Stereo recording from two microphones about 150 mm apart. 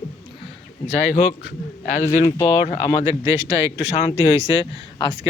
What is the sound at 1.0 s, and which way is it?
Speech, 50° left (ahead or behind).